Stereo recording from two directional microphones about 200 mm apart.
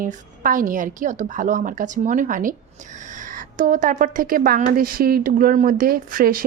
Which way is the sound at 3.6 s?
40° right (ahead or behind).